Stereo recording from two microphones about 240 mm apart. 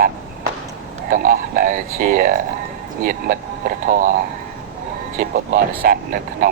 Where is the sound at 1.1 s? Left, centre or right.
Right.